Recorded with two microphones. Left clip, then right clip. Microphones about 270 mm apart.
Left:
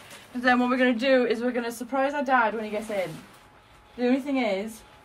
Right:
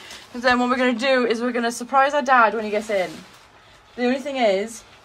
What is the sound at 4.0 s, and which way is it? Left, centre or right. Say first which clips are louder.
Speech: right 4 dB; right.